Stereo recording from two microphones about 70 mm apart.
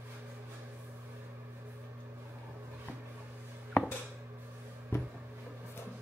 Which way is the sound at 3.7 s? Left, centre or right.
Left.